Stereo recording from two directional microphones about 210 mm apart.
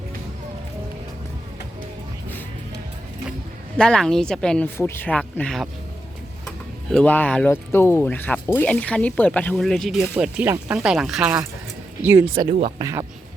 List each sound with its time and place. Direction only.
3.8 s speech: 5° left (ahead or behind)
6.9 s speech: 10° left (ahead or behind); by 12.3 s 10° right (ahead or behind)
12.3 s speech: 25° right (ahead or behind)
12.8 s speech: 15° right (ahead or behind)